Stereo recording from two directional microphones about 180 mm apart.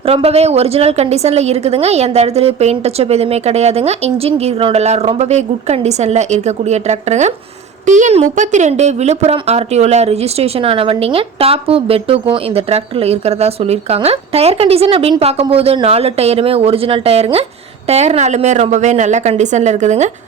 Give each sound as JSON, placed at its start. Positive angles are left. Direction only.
{"t": 0.0, "sound": "speech", "side_deg": -35}